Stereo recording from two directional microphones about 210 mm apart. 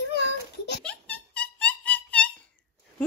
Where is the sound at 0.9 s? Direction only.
5° left (ahead or behind).